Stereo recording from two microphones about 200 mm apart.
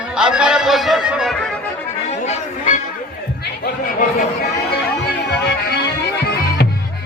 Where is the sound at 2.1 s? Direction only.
35° left (ahead or behind).